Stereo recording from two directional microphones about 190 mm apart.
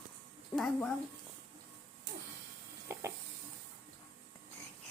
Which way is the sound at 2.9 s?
15° right (ahead or behind).